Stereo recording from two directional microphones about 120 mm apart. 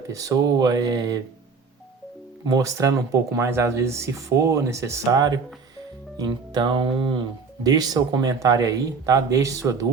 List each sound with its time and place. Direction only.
0.1 s speech: 30° right (ahead or behind)
2.4 s speech: 30° right (ahead or behind)
7.6 s speech: 30° right (ahead or behind)